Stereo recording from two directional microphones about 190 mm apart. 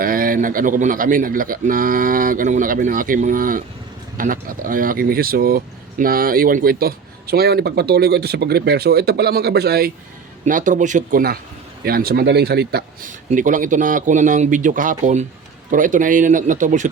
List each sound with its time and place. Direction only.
0.0 s speech: 50° right (ahead or behind)
10.4 s speech: 40° right (ahead or behind); by 13.1 s 60° right (ahead or behind)
13.3 s speech: 45° right (ahead or behind)